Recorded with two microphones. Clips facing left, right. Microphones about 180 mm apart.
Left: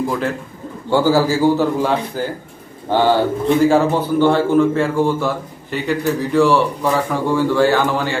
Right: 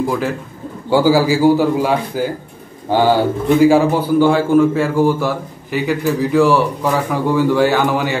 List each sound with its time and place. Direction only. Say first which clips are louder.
0.8 s a man's voice: right 2 dB; 10° right (ahead or behind)